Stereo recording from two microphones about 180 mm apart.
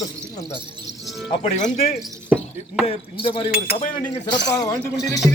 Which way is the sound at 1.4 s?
40° left (ahead or behind).